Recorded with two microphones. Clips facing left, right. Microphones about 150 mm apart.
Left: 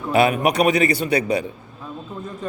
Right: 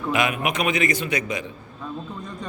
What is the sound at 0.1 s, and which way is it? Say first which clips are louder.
A man's voice: left 7 dB; 35° left (ahead or behind).